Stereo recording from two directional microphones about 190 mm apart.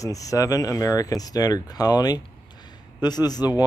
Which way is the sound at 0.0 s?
15° left (ahead or behind).